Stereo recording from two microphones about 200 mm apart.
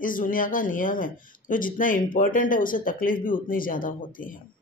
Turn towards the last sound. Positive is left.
turn(degrees=45)  # may be behind; listen again after turning